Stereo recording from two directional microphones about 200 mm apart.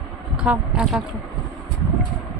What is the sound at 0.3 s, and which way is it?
Speech, 5° right (ahead or behind).